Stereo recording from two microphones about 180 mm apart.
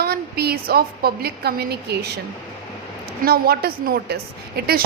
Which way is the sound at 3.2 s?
60° right (ahead or behind).